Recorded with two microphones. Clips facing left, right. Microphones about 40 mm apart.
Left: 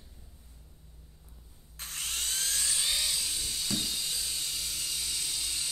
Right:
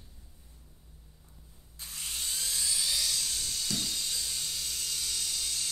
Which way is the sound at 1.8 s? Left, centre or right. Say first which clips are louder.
Left 3 dB; left.